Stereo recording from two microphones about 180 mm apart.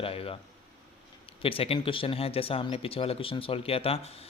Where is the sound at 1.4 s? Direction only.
30° left (ahead or behind).